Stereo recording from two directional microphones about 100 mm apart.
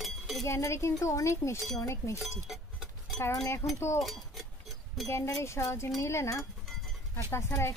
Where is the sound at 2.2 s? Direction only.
5° right (ahead or behind).